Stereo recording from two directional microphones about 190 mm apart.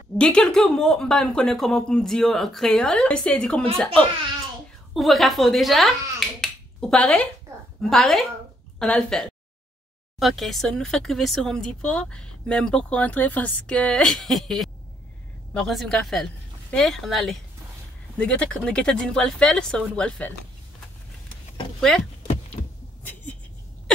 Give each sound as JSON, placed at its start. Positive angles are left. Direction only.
{"t": 0.2, "sound": "speech", "side_deg": 5}
{"t": 6.1, "sound": "finger snapping", "side_deg": 0}
{"t": 7.9, "sound": "speech", "side_deg": 0}
{"t": 22.6, "sound": "vehicle", "side_deg": 30}